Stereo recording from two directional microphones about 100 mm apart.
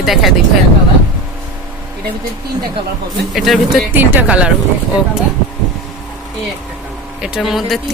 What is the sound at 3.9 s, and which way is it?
Speech, 20° right (ahead or behind).